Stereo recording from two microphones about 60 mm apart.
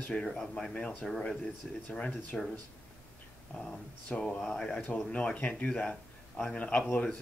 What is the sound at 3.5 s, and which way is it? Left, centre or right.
Speech, centre.